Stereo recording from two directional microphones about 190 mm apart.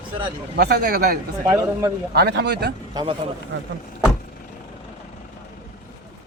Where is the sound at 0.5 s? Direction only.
55° right (ahead or behind).